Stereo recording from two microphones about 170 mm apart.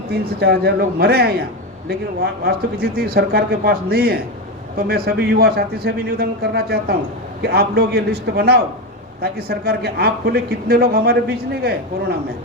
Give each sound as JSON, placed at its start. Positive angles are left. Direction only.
{"t": 0.1, "sound": "a man's voice", "side_deg": -70}